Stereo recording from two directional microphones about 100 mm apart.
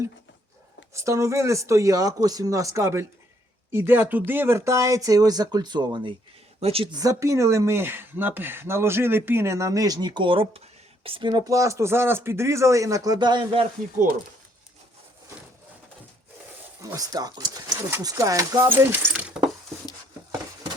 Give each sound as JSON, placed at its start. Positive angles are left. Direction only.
{"t": 0.9, "sound": "speech", "side_deg": -30}
{"t": 6.6, "sound": "speech", "side_deg": -80}
{"t": 6.9, "sound": "speech", "side_deg": -35}
{"t": 13.1, "sound": "speech", "side_deg": -45}
{"t": 16.8, "sound": "speech", "side_deg": -35}
{"t": 18.7, "sound": "speech", "side_deg": -20}